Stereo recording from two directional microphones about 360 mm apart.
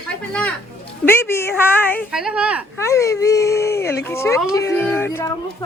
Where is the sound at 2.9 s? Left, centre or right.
Centre.